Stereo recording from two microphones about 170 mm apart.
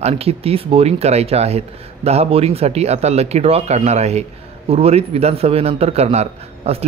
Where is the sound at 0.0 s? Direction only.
35° right (ahead or behind).